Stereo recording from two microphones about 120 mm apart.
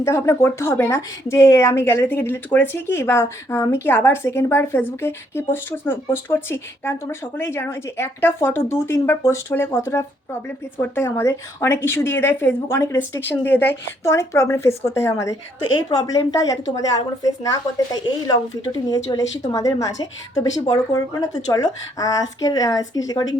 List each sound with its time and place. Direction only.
0.0 s a woman's voice: 20° left (ahead or behind)